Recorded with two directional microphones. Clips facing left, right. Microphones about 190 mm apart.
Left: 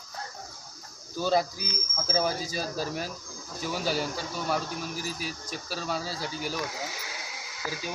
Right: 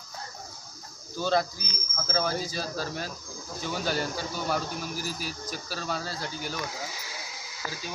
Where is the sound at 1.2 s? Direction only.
10° left (ahead or behind).